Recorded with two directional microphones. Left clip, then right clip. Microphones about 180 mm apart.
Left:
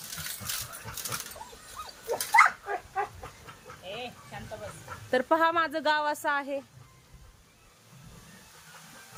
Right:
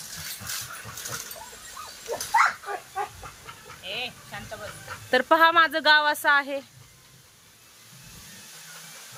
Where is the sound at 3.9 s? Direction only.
15° left (ahead or behind).